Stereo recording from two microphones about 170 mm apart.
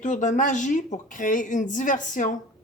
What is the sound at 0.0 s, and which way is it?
Speech, 45° left (ahead or behind).